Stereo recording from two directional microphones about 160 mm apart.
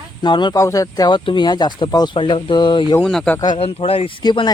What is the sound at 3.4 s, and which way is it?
Speech, 35° left (ahead or behind).